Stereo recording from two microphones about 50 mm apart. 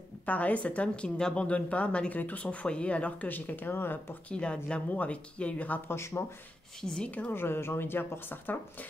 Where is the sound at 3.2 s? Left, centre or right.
Left.